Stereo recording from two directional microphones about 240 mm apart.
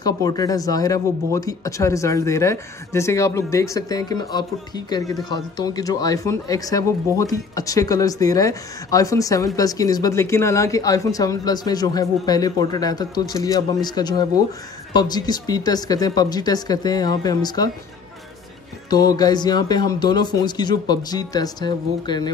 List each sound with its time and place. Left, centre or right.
0.0 s speech: centre
18.9 s speech: centre